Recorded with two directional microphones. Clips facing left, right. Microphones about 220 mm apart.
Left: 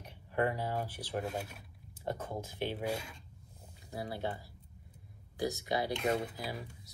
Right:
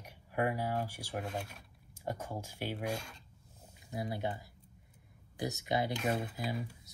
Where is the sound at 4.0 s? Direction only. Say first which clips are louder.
Right 1 dB; 20° right (ahead or behind).